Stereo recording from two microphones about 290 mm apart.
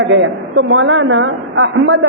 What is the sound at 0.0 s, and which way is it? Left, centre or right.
A woman's voice, right.